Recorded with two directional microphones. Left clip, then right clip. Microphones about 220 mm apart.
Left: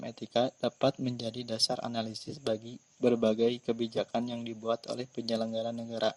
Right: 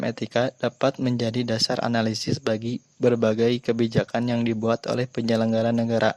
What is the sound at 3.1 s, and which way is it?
Speech, 10° right (ahead or behind).